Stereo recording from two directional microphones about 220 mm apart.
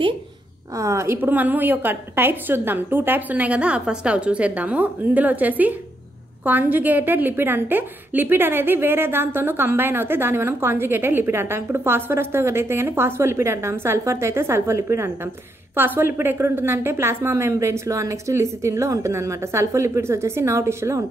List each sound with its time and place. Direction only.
0.7 s a woman's voice: 15° right (ahead or behind)